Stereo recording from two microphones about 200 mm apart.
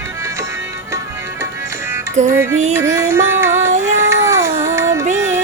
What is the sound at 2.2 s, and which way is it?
Music, 35° right (ahead or behind).